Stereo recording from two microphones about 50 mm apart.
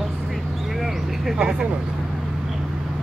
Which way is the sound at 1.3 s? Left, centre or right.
Centre.